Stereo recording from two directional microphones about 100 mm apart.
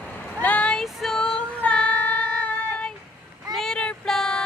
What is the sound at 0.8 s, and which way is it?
Female singing, 5° left (ahead or behind).